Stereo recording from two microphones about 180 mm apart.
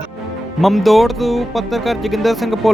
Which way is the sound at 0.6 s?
Centre (ahead or behind).